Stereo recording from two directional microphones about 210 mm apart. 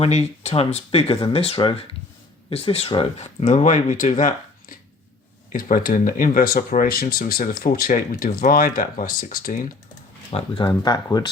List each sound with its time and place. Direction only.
0.0 s speech: 30° left (ahead or behind)
10.3 s speech: 25° left (ahead or behind)